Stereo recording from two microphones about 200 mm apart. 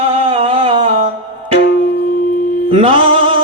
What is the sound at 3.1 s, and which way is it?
Music, 25° right (ahead or behind).